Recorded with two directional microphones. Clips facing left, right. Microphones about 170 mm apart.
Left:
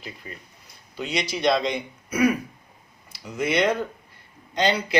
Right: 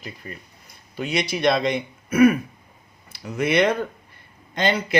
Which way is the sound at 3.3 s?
60° right (ahead or behind).